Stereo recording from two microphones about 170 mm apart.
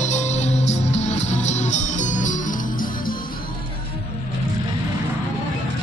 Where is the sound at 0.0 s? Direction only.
45° left (ahead or behind).